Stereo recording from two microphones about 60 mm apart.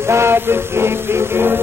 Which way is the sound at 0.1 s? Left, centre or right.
Right.